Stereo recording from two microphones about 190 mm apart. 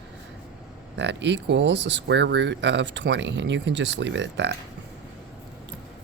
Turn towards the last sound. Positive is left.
turn(degrees=-70)  # may be behind; listen again after turning